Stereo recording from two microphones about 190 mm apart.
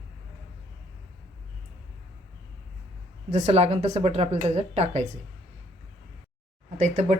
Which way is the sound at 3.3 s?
35° right (ahead or behind).